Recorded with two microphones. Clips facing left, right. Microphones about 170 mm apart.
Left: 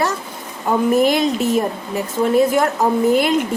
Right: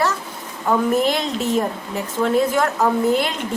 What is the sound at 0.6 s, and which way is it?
A woman's voice, 10° left (ahead or behind).